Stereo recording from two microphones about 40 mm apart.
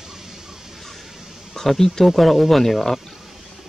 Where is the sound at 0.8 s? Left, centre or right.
Centre.